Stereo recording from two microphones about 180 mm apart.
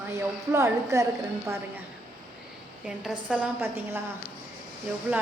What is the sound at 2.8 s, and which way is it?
A woman's voice, 5° right (ahead or behind).